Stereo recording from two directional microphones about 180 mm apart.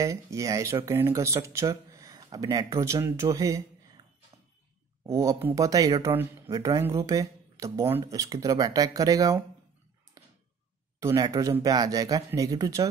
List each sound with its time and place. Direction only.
0.0 s speech: 15° right (ahead or behind)
5.0 s speech: 15° right (ahead or behind)
10.2 s a sound: 20° right (ahead or behind)
11.0 s speech: 20° right (ahead or behind)